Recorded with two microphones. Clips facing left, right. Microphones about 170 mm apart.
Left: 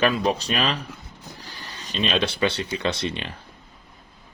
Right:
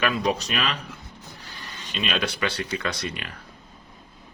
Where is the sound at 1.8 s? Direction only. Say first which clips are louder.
Left 4 dB; 40° left (ahead or behind).